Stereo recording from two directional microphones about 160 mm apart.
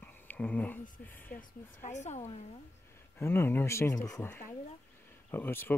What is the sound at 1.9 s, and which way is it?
Speech, 45° left (ahead or behind).